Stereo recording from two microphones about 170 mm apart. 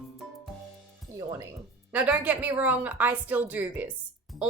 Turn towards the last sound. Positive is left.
turn(degrees=-10)  # may be behind; listen again after turning